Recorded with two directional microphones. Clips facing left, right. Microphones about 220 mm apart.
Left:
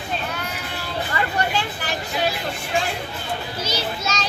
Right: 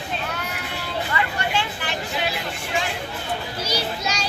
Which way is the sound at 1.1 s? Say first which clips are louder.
Left 2 dB; 40° left (ahead or behind).